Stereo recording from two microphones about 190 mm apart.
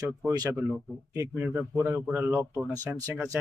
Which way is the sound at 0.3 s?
20° right (ahead or behind).